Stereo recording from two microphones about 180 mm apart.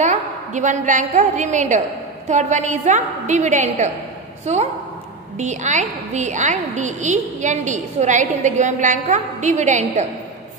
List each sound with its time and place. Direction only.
0.0 s a woman's voice: 40° right (ahead or behind)